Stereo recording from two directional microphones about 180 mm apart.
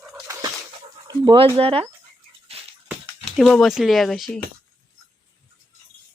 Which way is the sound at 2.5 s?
35° right (ahead or behind).